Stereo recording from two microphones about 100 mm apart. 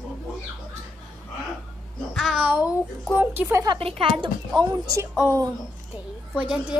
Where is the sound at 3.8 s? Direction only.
65° right (ahead or behind).